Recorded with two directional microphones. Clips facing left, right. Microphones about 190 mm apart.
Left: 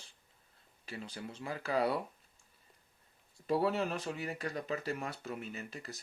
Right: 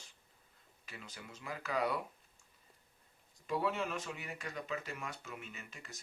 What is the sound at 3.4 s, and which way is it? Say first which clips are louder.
Speech: left 5 dB; 35° left (ahead or behind).